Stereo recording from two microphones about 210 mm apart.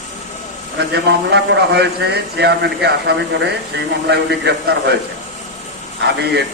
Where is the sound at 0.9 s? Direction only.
55° right (ahead or behind).